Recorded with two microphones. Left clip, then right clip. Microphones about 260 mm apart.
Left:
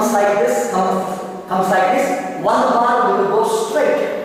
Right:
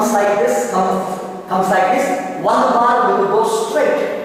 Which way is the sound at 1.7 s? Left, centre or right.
Centre.